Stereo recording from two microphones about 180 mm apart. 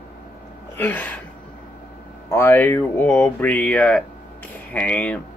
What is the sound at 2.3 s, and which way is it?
Speech, 15° left (ahead or behind).